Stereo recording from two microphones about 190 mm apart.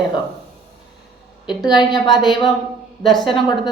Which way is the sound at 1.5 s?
25° left (ahead or behind).